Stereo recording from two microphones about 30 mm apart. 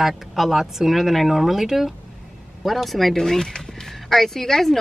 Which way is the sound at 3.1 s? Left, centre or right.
Centre.